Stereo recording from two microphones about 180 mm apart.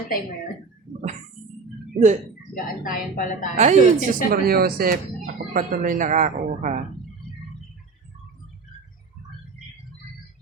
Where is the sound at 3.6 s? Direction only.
40° right (ahead or behind).